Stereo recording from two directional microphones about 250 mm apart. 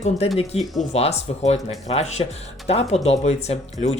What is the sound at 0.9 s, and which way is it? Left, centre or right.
Speech, left.